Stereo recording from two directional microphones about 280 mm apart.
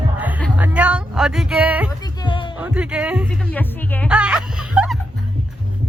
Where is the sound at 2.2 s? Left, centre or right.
Centre.